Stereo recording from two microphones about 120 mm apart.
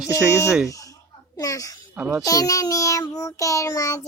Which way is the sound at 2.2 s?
30° left (ahead or behind).